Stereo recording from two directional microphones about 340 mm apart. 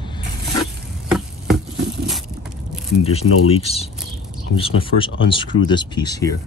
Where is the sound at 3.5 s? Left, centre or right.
Centre.